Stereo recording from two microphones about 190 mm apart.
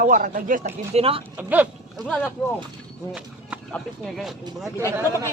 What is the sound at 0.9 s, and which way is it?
Speech, 30° right (ahead or behind).